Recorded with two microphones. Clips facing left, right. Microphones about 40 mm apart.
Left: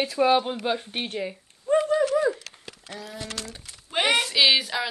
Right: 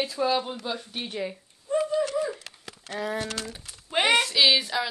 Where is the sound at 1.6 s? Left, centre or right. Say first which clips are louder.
Left 4 dB; left.